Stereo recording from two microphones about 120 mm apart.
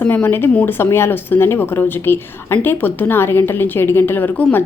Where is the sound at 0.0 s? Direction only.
15° left (ahead or behind).